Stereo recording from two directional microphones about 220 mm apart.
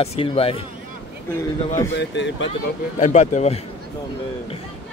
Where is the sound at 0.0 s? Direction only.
25° left (ahead or behind).